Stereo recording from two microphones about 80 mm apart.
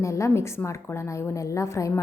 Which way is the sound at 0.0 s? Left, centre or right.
Left.